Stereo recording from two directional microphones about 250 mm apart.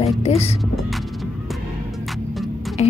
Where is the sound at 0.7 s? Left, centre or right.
Centre.